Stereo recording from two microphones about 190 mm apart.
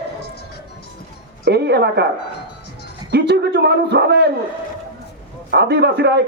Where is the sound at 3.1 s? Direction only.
60° right (ahead or behind).